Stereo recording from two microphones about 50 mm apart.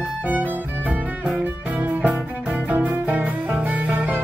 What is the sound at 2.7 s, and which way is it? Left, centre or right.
Music, right.